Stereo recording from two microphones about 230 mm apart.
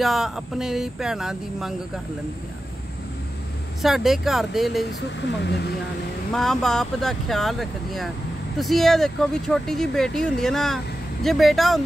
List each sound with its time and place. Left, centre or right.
0.0 s speech: centre
3.8 s speech: centre
5.4 s speech: left
6.3 s speech: centre